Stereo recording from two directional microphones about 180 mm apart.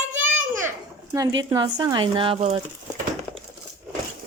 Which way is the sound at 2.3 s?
40° right (ahead or behind).